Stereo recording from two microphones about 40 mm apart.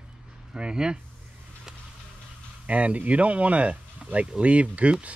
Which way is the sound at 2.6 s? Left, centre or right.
Right.